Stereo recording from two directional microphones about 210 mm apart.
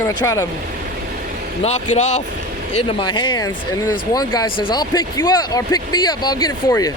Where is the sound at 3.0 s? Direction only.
20° left (ahead or behind).